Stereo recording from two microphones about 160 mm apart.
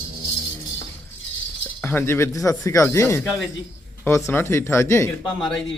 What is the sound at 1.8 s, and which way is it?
A man's voice, 15° left (ahead or behind).